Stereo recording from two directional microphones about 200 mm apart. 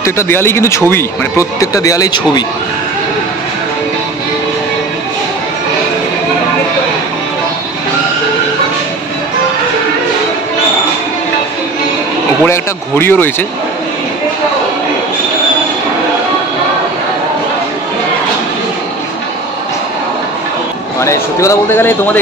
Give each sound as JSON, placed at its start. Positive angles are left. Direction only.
{"t": 0.0, "sound": "a man's voice", "side_deg": 10}
{"t": 12.4, "sound": "a man's voice", "side_deg": 10}
{"t": 21.0, "sound": "a man's voice", "side_deg": 15}